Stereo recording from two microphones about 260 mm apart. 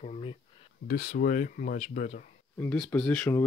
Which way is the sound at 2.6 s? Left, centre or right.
Centre.